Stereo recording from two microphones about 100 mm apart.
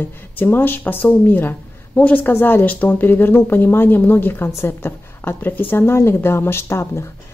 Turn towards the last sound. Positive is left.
turn(degrees=25)  # may be behind; listen again after turning